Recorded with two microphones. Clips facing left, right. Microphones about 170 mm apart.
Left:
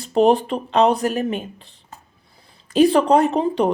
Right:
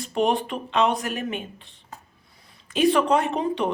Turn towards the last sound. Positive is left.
turn(degrees=35)  # may be behind; listen again after turning